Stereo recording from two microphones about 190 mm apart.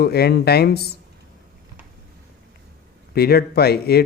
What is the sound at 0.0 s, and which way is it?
Speech, 55° left (ahead or behind).